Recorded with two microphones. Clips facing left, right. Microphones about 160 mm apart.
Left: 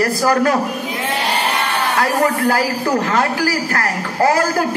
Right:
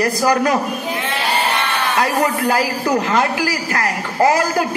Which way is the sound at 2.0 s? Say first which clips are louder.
Left 1 dB; 15° right (ahead or behind).